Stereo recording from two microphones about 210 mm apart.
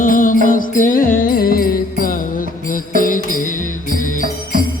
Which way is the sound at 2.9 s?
40° left (ahead or behind).